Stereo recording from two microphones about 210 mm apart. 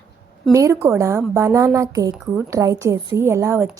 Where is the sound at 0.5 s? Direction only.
15° right (ahead or behind).